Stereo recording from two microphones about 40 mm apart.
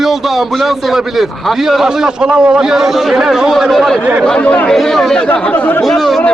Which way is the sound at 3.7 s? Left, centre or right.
Centre.